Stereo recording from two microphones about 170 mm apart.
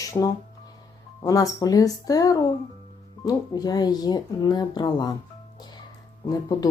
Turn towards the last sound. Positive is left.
turn(degrees=25)  # may be behind; listen again after turning